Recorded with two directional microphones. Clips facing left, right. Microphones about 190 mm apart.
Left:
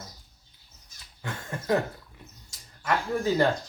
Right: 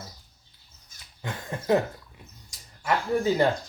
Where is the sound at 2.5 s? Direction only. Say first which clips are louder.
Right 1 dB; 15° right (ahead or behind).